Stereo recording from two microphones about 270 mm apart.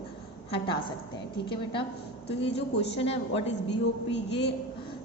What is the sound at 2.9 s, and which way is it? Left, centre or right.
Speech, left.